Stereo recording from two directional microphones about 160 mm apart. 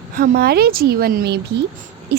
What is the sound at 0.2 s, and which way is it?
A woman's voice, 75° right (ahead or behind).